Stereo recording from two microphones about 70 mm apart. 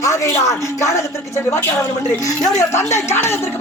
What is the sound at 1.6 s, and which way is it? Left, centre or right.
Speech, left.